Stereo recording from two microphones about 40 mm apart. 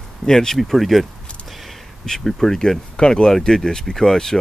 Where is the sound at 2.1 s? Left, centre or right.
Centre.